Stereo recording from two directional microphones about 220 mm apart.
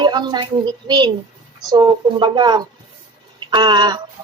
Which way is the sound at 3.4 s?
20° right (ahead or behind).